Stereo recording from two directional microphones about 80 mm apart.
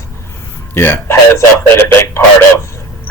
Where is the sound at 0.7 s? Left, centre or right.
Left.